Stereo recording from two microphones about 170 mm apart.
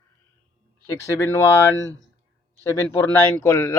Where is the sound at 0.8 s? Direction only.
20° left (ahead or behind).